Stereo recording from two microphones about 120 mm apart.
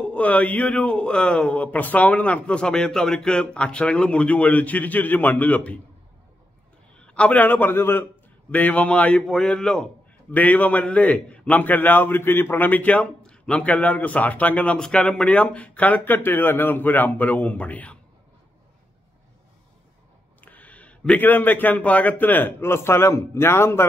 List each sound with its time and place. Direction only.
0.0 s a man's voice: 10° left (ahead or behind)
7.0 s a man's voice: 10° left (ahead or behind)
20.3 s a man's voice: 15° left (ahead or behind)